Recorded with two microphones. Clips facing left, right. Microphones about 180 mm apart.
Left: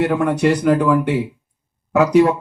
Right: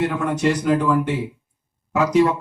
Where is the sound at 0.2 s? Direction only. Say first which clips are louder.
Left 4 dB; 60° left (ahead or behind).